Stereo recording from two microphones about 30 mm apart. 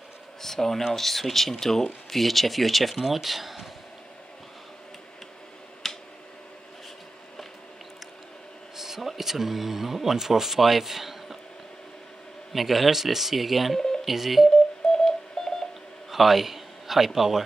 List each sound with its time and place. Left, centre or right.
0.4 s speech: centre
3.0 s speech: centre
5.8 s finger snapping: centre
8.7 s a sound: centre
10.0 s speech: centre
12.5 s speech: centre
13.7 s telephone dialing: centre
14.0 s speech: centre
14.9 s radio: centre
16.1 s a man's voice: centre